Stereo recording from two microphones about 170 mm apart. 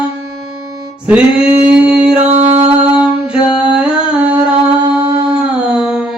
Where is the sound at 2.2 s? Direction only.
40° right (ahead or behind).